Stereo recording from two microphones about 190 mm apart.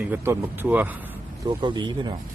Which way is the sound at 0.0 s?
10° right (ahead or behind).